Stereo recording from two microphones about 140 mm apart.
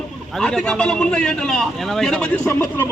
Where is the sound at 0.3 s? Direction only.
5° left (ahead or behind).